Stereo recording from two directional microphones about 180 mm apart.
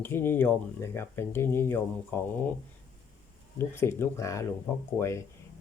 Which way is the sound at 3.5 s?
15° left (ahead or behind).